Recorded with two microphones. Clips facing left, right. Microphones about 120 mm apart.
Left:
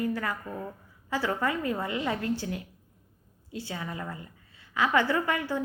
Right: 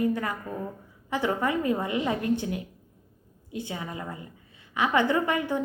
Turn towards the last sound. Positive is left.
turn(degrees=-20)  # may be behind; listen again after turning